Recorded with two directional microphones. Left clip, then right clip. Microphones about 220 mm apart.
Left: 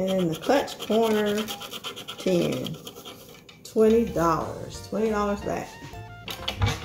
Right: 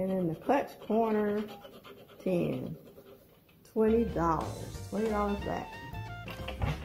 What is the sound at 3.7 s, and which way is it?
Speech, 25° right (ahead or behind).